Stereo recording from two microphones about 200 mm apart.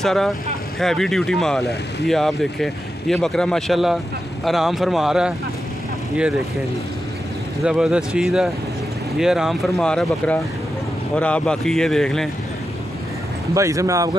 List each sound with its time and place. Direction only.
0.0 s speech: centre (ahead or behind)
7.6 s speech: 5° right (ahead or behind)
13.6 s speech: 15° right (ahead or behind)